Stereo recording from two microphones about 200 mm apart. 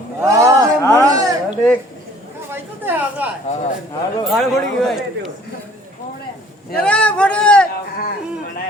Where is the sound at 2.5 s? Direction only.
10° right (ahead or behind).